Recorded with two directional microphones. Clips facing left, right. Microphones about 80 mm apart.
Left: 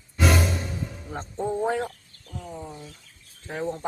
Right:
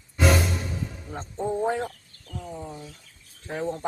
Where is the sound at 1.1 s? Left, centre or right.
Centre.